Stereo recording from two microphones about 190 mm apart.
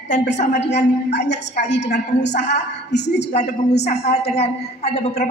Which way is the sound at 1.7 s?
65° left (ahead or behind).